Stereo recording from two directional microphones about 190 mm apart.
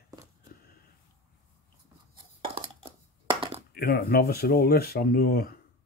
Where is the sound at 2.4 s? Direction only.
30° right (ahead or behind).